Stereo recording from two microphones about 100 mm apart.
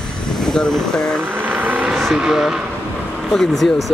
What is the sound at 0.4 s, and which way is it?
Speech, 5° left (ahead or behind).